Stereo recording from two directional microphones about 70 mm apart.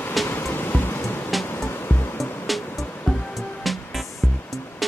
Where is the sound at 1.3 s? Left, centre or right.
Centre.